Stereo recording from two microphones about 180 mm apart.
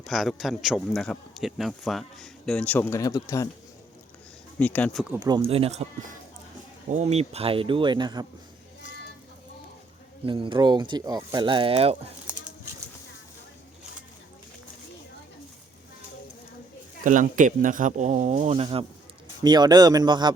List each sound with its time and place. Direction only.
0.0 s a man's voice: centre (ahead or behind); by 3.5 s 20° left (ahead or behind)
4.6 s speech: 10° left (ahead or behind)
5.1 s speech: 20° right (ahead or behind)
5.4 s speech: 30° right (ahead or behind)
6.9 s speech: 35° right (ahead or behind)
10.2 s speech: 25° right (ahead or behind)
17.0 s speech: 45° right (ahead or behind); by 20.3 s 25° right (ahead or behind)